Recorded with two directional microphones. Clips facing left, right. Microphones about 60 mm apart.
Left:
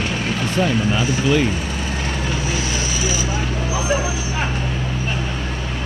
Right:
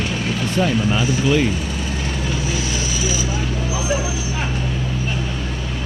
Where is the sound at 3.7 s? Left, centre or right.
Left.